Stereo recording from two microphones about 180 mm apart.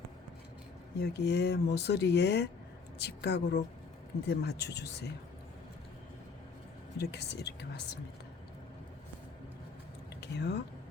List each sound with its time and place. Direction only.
0.9 s speech: 65° left (ahead or behind)
7.0 s speech: 70° left (ahead or behind)
10.2 s speech: 70° left (ahead or behind)